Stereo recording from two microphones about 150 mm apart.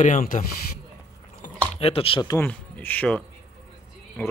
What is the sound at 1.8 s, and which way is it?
Cutlery, 40° left (ahead or behind).